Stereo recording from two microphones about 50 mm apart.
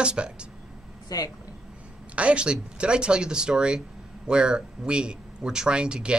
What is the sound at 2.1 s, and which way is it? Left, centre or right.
Speech, right.